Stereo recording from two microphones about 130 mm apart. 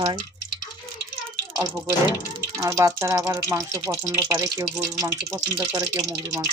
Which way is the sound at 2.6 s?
25° right (ahead or behind).